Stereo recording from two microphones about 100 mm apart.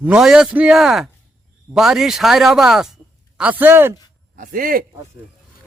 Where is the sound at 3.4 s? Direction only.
15° right (ahead or behind).